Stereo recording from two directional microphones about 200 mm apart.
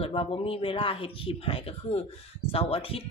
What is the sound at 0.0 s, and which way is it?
Speech, 25° left (ahead or behind).